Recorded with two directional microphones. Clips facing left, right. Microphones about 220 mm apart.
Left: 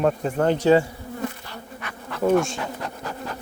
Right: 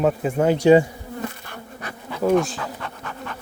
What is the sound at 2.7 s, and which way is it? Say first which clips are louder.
Bee: left 2 dB; 35° left (ahead or behind).